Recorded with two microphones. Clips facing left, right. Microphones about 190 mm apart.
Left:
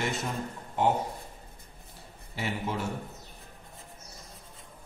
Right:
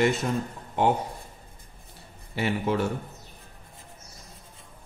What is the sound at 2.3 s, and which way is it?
Speech, 65° right (ahead or behind).